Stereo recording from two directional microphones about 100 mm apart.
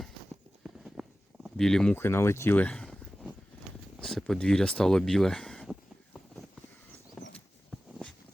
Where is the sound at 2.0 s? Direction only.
25° left (ahead or behind); by 5.7 s 5° left (ahead or behind).